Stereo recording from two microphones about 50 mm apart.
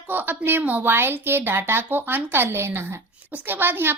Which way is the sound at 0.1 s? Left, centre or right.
Right.